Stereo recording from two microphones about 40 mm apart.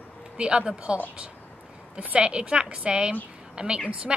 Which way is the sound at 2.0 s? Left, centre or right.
Right.